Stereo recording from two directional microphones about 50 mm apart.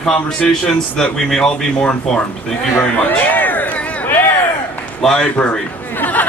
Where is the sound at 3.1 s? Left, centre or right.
Left.